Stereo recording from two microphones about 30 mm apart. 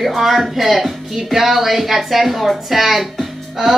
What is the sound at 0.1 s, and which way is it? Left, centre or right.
A child's voice, centre.